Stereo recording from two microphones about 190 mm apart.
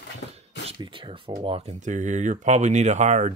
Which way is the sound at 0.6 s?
25° right (ahead or behind).